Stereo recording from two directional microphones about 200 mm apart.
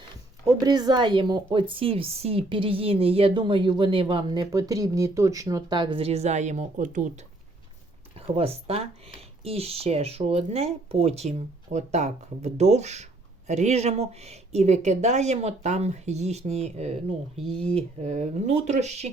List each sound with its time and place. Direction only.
0.6 s a woman's voice: 20° right (ahead or behind); by 7.1 s 40° right (ahead or behind)
8.4 s a woman's voice: 30° right (ahead or behind)